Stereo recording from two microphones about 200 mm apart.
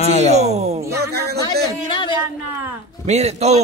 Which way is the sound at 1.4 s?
25° left (ahead or behind).